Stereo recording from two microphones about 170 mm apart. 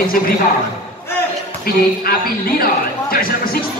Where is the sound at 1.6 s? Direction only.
60° left (ahead or behind).